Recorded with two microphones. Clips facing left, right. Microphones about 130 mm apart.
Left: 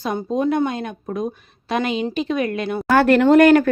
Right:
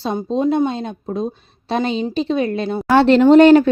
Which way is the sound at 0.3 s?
25° right (ahead or behind).